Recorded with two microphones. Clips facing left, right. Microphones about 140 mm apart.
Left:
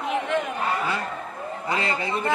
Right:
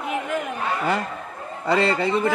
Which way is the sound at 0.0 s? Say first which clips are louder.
Left 1 dB; 5° right (ahead or behind).